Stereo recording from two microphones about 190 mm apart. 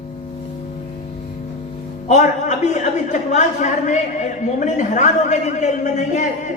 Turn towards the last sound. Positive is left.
turn(degrees=40)  # may be behind; listen again after turning